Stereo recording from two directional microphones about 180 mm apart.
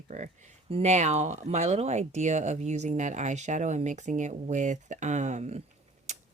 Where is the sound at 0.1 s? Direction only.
40° right (ahead or behind).